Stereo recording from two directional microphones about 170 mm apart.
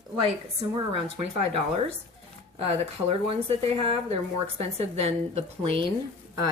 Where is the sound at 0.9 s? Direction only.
35° right (ahead or behind).